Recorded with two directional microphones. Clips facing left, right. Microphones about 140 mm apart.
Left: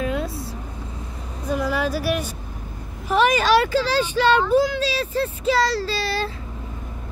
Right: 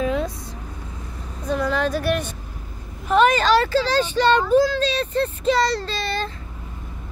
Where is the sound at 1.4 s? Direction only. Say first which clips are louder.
Right 1 dB; 10° left (ahead or behind).